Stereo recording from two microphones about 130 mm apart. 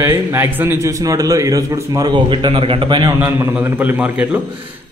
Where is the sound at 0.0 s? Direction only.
20° right (ahead or behind).